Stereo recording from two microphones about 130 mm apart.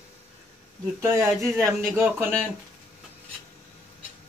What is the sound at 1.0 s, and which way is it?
A man's voice, 20° right (ahead or behind).